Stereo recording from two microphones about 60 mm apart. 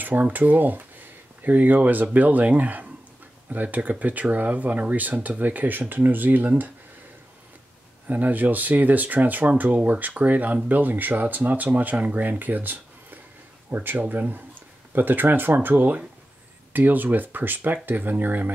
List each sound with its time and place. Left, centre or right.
0.0 s speech: right
8.1 s speech: right